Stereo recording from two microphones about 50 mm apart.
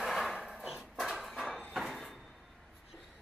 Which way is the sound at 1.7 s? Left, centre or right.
Centre.